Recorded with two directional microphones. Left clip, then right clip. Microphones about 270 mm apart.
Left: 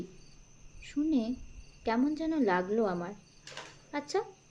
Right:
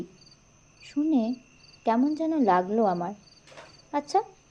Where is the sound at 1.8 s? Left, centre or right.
Centre.